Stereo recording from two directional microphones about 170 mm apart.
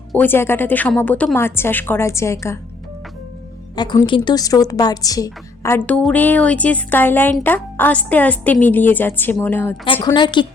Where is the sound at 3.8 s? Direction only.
25° left (ahead or behind).